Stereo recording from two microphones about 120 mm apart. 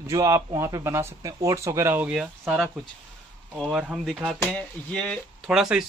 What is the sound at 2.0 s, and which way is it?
Speech, 10° right (ahead or behind).